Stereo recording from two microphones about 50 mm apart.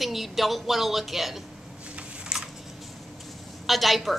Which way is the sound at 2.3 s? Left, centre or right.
Centre.